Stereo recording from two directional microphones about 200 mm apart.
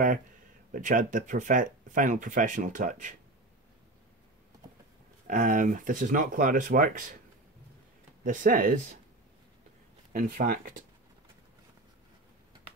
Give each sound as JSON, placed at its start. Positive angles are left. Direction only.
{"t": 0.7, "sound": "speech", "side_deg": -40}
{"t": 5.2, "sound": "speech", "side_deg": -45}
{"t": 8.2, "sound": "speech", "side_deg": -45}
{"t": 10.1, "sound": "speech", "side_deg": -45}